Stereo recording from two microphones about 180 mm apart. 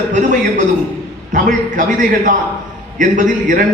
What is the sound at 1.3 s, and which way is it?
A man's voice, 45° right (ahead or behind).